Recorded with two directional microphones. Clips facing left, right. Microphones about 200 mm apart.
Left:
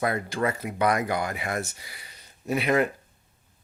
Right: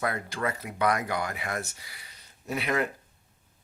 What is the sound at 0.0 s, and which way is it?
Speech, 20° left (ahead or behind).